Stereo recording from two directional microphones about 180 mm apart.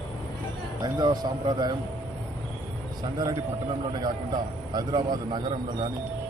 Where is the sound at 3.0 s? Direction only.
20° right (ahead or behind).